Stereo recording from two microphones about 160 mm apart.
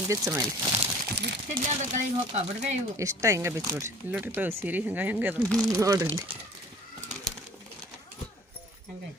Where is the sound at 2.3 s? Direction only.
45° right (ahead or behind).